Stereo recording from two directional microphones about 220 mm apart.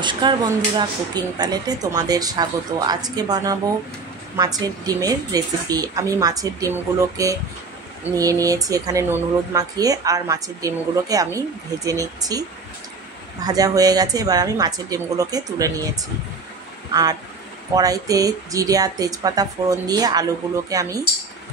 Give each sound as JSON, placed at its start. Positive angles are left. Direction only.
{"t": 0.0, "sound": "speech", "side_deg": -20}
{"t": 16.9, "sound": "speech", "side_deg": -15}